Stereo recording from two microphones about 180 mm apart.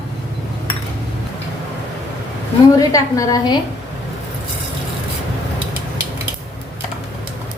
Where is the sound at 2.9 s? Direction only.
20° left (ahead or behind).